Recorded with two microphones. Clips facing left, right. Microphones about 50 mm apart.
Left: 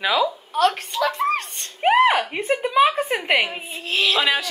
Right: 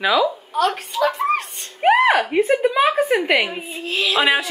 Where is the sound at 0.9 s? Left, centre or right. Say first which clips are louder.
Right 3 dB; right.